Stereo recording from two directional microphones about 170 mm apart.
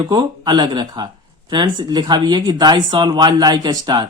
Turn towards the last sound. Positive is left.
turn(degrees=-25)  # may be behind; listen again after turning